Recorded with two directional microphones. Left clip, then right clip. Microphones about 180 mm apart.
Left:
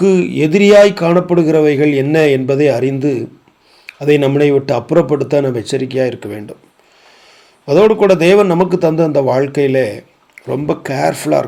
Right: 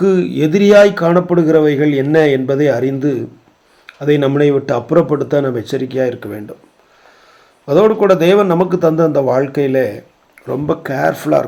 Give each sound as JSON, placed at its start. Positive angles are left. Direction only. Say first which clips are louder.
{"t": 0.0, "sound": "a man's voice", "louder": "left 1 dB", "side_deg": 20}
{"t": 7.6, "sound": "a man's voice", "louder": "left 1 dB", "side_deg": 25}